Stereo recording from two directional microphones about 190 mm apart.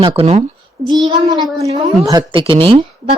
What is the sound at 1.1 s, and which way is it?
A woman's voice, 20° right (ahead or behind).